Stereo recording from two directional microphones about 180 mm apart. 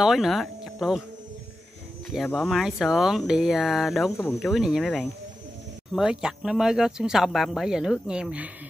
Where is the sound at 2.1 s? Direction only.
5° left (ahead or behind).